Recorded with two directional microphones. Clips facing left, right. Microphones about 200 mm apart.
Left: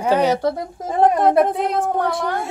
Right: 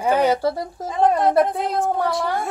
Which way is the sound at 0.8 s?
55° left (ahead or behind).